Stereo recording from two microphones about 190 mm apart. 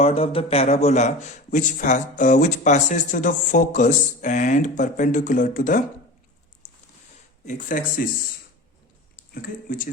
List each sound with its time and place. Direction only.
0.0 s speech: 30° left (ahead or behind)
7.4 s speech: 45° left (ahead or behind)
9.3 s speech: 45° left (ahead or behind)